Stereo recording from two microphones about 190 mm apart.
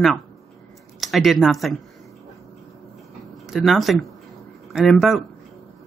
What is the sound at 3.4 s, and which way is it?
A woman's voice, centre (ahead or behind).